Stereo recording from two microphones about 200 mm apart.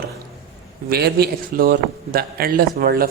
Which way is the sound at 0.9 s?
50° right (ahead or behind).